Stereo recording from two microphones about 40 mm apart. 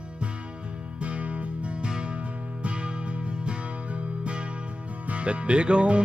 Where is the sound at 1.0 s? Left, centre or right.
Right.